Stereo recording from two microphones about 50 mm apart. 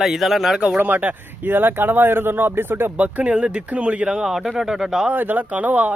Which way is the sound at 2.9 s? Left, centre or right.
Right.